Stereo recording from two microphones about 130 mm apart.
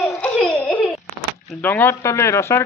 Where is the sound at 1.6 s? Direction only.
15° left (ahead or behind).